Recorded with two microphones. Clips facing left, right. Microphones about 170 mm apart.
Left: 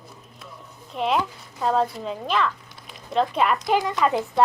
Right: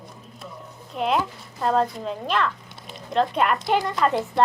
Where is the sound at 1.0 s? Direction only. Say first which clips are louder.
Even; centre (ahead or behind).